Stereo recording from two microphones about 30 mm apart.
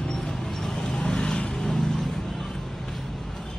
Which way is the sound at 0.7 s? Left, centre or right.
Left.